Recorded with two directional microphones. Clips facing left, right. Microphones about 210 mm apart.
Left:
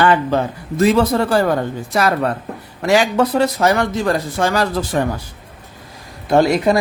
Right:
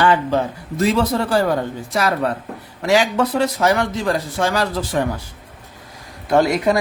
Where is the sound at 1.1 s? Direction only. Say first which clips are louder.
Left 3 dB; 55° left (ahead or behind).